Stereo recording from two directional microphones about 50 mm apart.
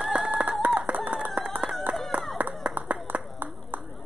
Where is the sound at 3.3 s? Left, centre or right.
Right.